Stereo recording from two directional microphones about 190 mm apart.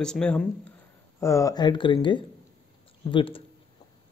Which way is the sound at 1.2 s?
15° left (ahead or behind).